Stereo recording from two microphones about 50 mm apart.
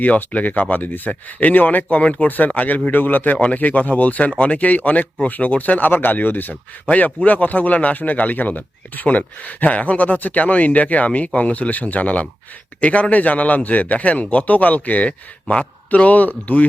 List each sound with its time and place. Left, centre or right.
0.0 s speech: left